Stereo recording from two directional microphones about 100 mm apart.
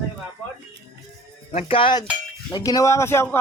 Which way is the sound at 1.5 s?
80° left.